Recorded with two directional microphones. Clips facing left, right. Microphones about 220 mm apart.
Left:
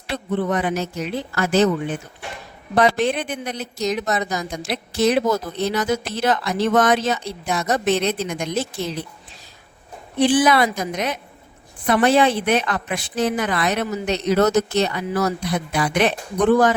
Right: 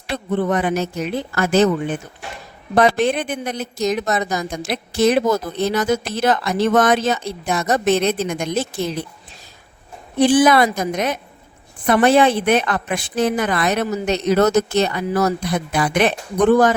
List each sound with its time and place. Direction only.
0.1 s a woman's voice: 50° right (ahead or behind)
10.2 s a woman's voice: 45° right (ahead or behind)